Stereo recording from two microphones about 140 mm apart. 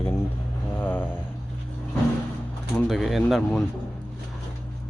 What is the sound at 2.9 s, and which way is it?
Speech, centre (ahead or behind).